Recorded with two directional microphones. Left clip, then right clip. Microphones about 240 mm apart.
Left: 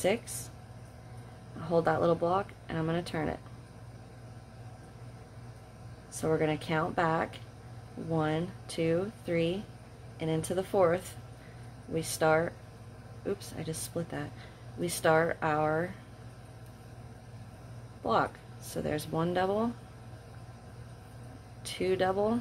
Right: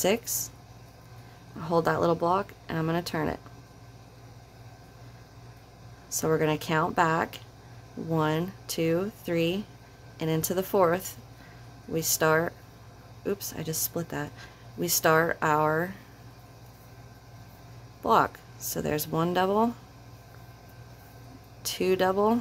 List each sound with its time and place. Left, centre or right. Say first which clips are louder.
0.0 s speech: right 3 dB; right
1.6 s speech: right 2 dB; right
6.2 s speech: right 3 dB; right
18.0 s speech: right 6 dB; right
21.6 s speech: right 4 dB; right